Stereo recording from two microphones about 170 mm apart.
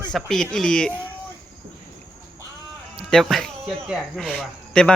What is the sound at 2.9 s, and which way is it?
Speech, centre (ahead or behind).